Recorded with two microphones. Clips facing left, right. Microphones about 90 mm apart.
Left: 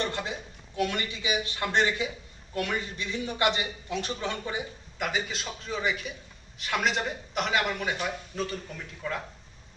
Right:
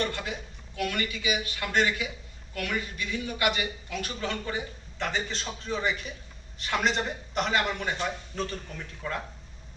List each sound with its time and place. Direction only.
0.0 s a man's voice: 25° left (ahead or behind); by 9.2 s centre (ahead or behind)